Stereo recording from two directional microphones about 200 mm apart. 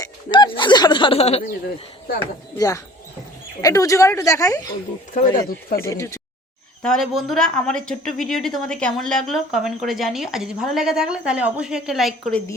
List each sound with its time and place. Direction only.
0.0 s speech: 25° left (ahead or behind)
2.6 s a woman's voice: 15° left (ahead or behind)
5.1 s speech: 40° left (ahead or behind)
5.8 s a woman's voice: 15° left (ahead or behind)
6.8 s a woman's voice: centre (ahead or behind)